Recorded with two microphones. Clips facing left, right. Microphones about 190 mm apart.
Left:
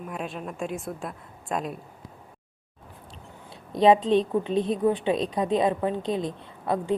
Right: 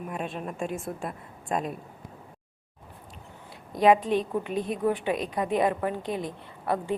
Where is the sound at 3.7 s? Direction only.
25° left (ahead or behind).